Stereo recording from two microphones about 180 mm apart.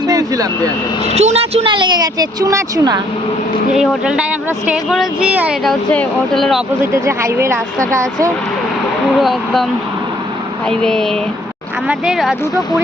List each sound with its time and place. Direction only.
0.1 s vehicle: 20° right (ahead or behind)
1.0 s a woman's voice: 35° right (ahead or behind); by 3.0 s 20° right (ahead or behind)
3.8 s speech: 5° right (ahead or behind)
7.0 s speech: 15° right (ahead or behind)
9.1 s speech: centre (ahead or behind)
10.7 s speech: 5° left (ahead or behind)